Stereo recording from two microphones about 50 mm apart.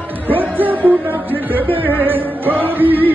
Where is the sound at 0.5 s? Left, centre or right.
Right.